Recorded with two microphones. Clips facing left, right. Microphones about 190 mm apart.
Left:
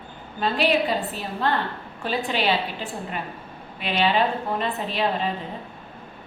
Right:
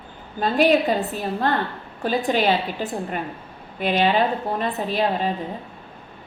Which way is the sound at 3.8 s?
45° right (ahead or behind).